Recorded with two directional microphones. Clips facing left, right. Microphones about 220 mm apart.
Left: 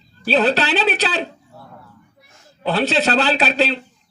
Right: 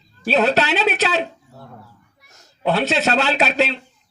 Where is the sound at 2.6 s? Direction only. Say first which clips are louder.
Even; 35° left (ahead or behind).